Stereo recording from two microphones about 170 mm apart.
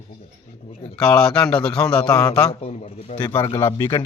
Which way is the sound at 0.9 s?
5° left (ahead or behind).